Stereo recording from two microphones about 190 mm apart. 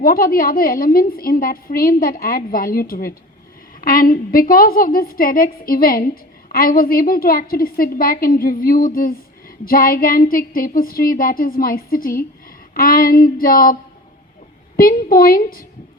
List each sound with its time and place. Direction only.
0.0 s a woman's voice: 50° left (ahead or behind)
14.8 s a woman's voice: 50° left (ahead or behind)